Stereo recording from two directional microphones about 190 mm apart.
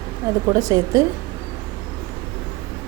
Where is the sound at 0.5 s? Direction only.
15° right (ahead or behind).